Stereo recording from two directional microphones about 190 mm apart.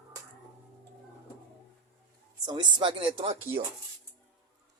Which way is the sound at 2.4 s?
25° right (ahead or behind).